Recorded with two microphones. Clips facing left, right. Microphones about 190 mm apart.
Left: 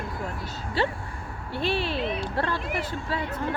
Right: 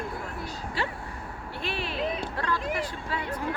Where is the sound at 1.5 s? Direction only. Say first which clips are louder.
Left 5 dB; 30° left (ahead or behind).